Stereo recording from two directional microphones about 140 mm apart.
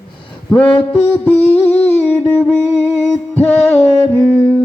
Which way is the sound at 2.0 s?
15° left (ahead or behind).